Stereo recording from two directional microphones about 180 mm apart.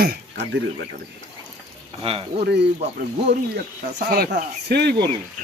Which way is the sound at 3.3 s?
65° right (ahead or behind).